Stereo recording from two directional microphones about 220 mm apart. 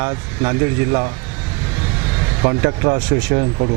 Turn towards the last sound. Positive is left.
turn(degrees=-30)  # may be behind; listen again after turning